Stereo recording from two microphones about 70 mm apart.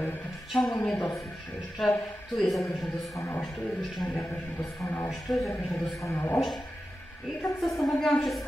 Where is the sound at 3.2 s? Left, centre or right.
Left.